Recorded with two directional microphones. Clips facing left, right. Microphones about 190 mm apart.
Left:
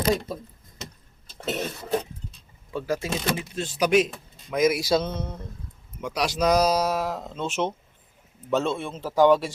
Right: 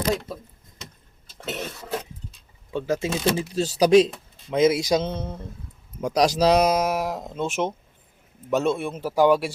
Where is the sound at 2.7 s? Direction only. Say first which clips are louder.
Right 3 dB; 20° right (ahead or behind).